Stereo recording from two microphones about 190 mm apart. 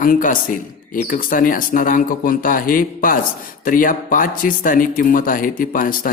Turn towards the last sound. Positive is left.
turn(degrees=45)  # may be behind; listen again after turning